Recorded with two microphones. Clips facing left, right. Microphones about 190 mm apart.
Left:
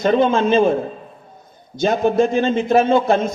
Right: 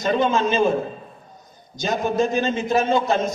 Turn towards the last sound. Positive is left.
turn(degrees=55)  # may be behind; listen again after turning